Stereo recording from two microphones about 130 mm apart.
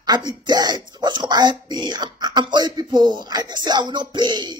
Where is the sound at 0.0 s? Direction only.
30° right (ahead or behind).